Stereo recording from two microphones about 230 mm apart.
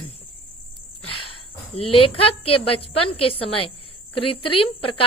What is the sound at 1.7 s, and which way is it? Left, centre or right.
Speech, left.